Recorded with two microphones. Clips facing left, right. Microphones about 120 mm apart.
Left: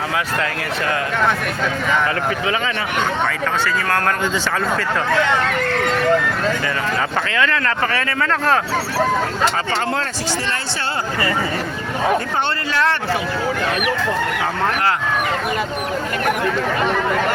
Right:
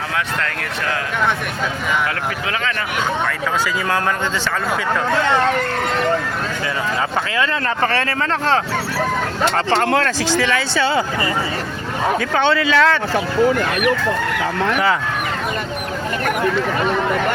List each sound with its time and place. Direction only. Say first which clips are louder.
7.3 s speech: left 1 dB; 25° right (ahead or behind)
9.7 s speech: right 5 dB; 65° right (ahead or behind)
12.5 s speech: right 4 dB; 90° right